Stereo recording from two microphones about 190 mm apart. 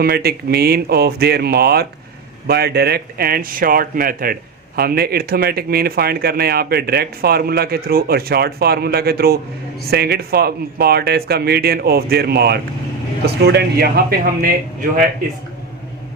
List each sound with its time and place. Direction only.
0.0 s speech: 55° right (ahead or behind)